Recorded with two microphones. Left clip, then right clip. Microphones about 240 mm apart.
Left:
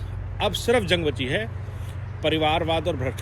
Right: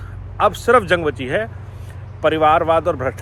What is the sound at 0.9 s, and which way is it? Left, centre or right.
Speech, right.